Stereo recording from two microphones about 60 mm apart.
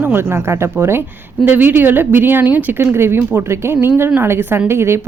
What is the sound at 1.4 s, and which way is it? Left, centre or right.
A woman's voice, right.